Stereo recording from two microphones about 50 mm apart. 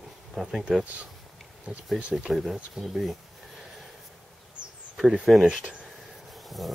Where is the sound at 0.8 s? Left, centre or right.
Right.